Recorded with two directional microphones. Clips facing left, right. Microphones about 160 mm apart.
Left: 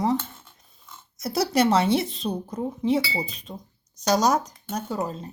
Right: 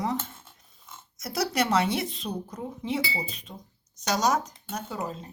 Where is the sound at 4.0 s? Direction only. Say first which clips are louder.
Left 4 dB; 35° left (ahead or behind).